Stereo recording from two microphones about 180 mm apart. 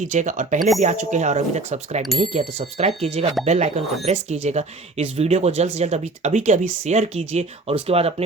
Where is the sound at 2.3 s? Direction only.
35° right (ahead or behind).